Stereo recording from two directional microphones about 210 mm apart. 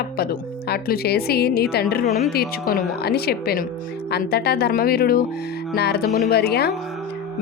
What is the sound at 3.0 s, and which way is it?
Speech, 50° left (ahead or behind).